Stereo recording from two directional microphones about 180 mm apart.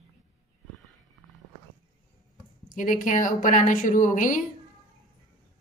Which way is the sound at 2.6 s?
50° left (ahead or behind).